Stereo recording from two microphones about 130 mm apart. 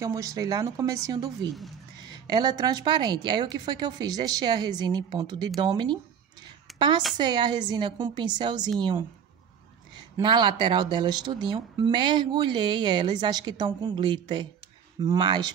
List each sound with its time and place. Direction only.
0.0 s speech: 25° right (ahead or behind)
6.7 s a sound: centre (ahead or behind)
7.2 s speech: 35° right (ahead or behind)
10.2 s speech: 35° right (ahead or behind)